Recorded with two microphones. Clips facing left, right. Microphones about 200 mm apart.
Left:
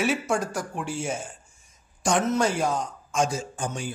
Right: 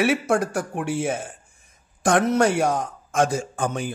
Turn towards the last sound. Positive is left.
turn(degrees=-55)  # may be behind; listen again after turning